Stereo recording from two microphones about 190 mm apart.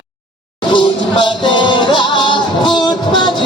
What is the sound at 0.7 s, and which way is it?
Music, 25° left (ahead or behind).